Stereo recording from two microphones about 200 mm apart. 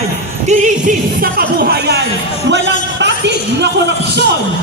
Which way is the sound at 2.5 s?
60° right (ahead or behind).